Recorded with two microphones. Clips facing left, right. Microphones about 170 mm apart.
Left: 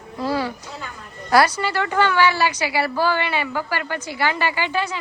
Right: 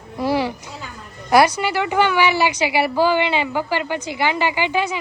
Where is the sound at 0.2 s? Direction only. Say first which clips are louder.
Right 3 dB; 15° right (ahead or behind).